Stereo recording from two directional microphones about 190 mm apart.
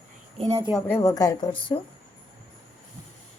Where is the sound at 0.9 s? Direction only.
15° left (ahead or behind).